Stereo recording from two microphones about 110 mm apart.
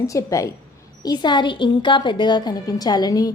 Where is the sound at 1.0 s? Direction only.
40° left (ahead or behind).